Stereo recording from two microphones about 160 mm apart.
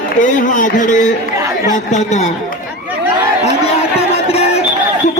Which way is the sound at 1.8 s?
45° left (ahead or behind).